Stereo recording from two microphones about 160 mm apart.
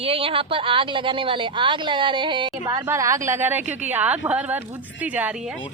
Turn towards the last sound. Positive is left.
turn(degrees=-5)  # may be behind; listen again after turning